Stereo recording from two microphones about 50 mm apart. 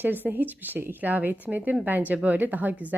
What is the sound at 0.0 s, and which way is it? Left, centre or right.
A woman's voice, right.